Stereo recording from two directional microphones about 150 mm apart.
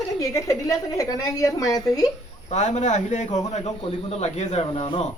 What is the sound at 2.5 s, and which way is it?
Speech, 50° left (ahead or behind).